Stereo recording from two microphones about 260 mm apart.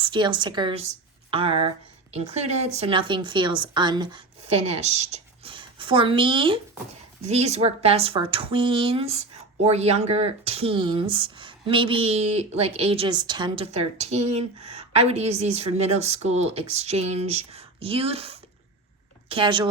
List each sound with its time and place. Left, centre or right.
0.0 s speech: centre